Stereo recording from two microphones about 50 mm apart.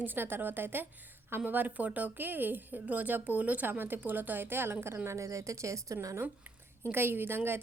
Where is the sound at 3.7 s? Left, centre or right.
Right.